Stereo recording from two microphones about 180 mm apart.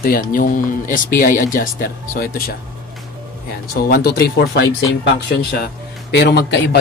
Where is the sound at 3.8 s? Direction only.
60° left (ahead or behind).